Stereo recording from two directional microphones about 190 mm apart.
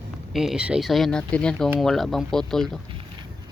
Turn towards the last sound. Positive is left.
turn(degrees=-25)  # may be behind; listen again after turning